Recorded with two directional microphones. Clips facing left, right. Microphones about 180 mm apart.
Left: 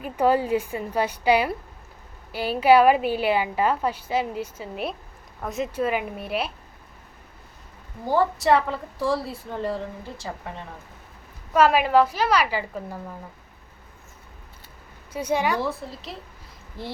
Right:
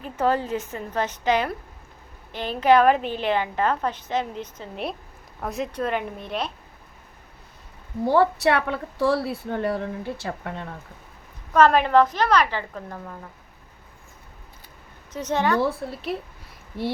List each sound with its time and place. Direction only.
0.0 s a woman's voice: 10° left (ahead or behind)
8.0 s a woman's voice: 65° right (ahead or behind)
11.5 s a woman's voice: 10° left (ahead or behind)
15.1 s a woman's voice: 10° left (ahead or behind)
15.9 s a woman's voice: 60° right (ahead or behind)